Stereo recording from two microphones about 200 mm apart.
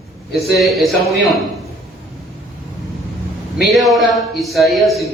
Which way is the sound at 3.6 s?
Centre (ahead or behind).